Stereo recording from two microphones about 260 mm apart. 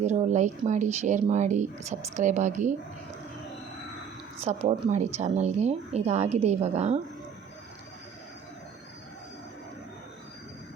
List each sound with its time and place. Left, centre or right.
0.0 s speech: right
4.4 s speech: right